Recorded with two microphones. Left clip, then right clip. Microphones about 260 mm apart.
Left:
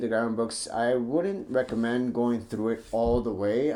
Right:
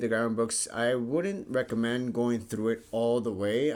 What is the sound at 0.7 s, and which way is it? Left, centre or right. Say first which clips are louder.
Speech: left 5 dB; right.